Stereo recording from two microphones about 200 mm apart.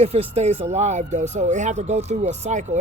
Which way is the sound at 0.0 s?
30° right (ahead or behind).